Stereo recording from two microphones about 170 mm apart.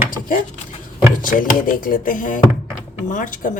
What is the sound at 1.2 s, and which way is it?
Speech, 55° left (ahead or behind).